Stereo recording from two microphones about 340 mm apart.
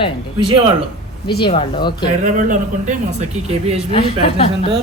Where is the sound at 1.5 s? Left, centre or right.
Centre.